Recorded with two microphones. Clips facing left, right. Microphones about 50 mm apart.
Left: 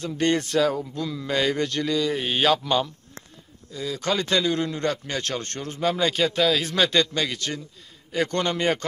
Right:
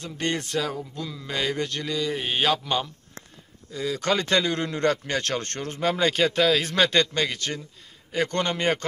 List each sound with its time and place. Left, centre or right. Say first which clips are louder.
0.0 s speech: left 5 dB; centre
3.7 s a man's voice: right 1 dB; right